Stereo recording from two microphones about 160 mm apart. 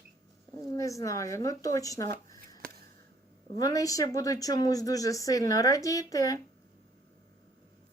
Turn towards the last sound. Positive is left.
turn(degrees=20)  # may be behind; listen again after turning